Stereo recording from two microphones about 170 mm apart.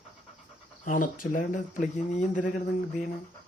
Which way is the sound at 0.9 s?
50° left (ahead or behind).